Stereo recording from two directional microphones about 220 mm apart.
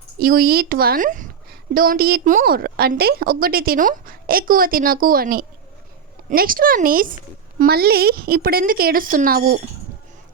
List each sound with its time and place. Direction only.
0.2 s a woman's voice: 40° right (ahead or behind)